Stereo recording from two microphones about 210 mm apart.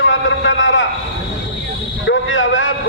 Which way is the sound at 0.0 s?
60° left (ahead or behind).